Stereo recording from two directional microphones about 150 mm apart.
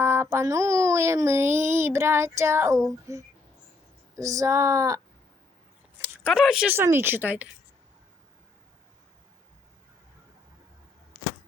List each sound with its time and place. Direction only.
0.0 s child singing: 15° right (ahead or behind)
3.1 s speech: 20° right (ahead or behind)
6.2 s child singing: 5° right (ahead or behind)